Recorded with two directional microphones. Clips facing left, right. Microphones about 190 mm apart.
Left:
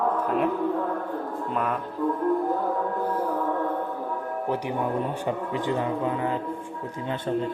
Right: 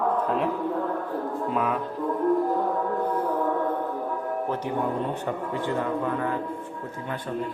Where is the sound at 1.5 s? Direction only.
Centre (ahead or behind).